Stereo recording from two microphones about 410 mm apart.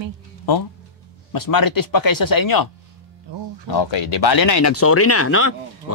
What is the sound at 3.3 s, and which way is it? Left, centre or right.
Music, right.